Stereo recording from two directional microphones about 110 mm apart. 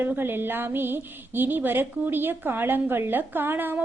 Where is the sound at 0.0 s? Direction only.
20° right (ahead or behind).